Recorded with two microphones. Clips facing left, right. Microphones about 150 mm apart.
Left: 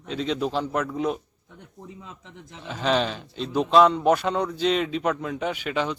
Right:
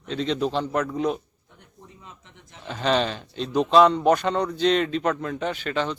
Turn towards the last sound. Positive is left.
turn(degrees=10)  # may be behind; listen again after turning